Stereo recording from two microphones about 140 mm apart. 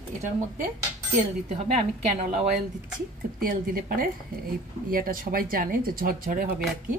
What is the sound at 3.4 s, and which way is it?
Speech, 90° right.